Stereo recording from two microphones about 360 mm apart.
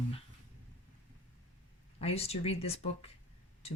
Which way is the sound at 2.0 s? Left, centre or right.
Centre.